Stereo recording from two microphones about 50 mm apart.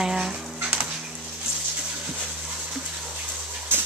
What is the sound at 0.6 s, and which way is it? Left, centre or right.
Dog, right.